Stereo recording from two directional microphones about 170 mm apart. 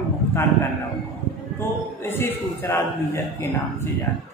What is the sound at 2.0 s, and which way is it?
A woman's voice, 10° left (ahead or behind).